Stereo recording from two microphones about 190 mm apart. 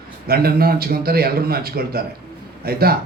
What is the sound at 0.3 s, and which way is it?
A man's voice, 55° right (ahead or behind).